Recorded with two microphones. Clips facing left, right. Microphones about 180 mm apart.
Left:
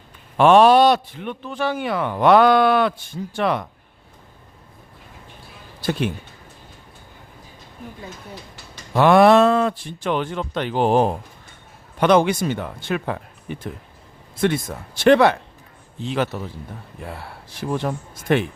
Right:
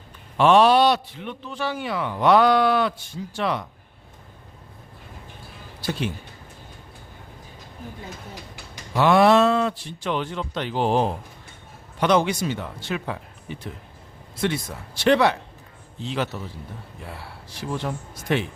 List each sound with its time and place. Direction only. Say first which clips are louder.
0.3 s a man's voice: left 4 dB; 50° left (ahead or behind)
5.8 s speech: left 5 dB; 55° left (ahead or behind)
8.9 s a man's voice: left 4 dB; 55° left (ahead or behind)